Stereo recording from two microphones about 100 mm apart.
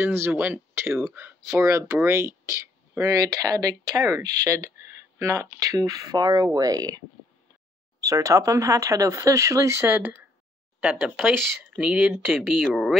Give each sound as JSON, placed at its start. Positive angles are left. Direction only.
{"t": 0.0, "sound": "speech", "side_deg": -20}
{"t": 8.0, "sound": "speech", "side_deg": -30}
{"t": 11.2, "sound": "speech", "side_deg": -10}